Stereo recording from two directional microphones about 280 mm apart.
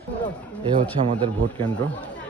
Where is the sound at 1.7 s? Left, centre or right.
Centre.